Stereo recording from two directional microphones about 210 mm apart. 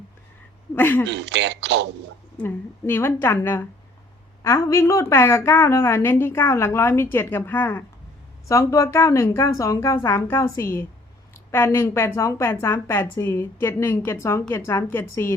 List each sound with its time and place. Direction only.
0.8 s a woman's voice: 10° left (ahead or behind)
1.0 s speech: 55° right (ahead or behind)
2.4 s a woman's voice: 10° left (ahead or behind)